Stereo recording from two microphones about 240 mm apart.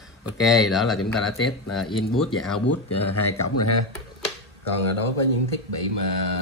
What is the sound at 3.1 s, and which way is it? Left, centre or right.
Speech, left.